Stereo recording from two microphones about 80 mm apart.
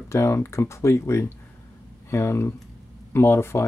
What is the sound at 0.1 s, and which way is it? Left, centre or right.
Speech, left.